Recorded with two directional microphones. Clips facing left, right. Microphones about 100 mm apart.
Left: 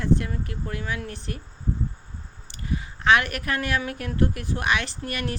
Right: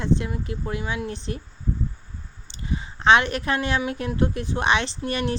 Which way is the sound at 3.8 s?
20° right (ahead or behind).